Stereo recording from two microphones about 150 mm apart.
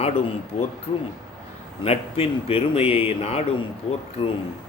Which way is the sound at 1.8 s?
40° left (ahead or behind).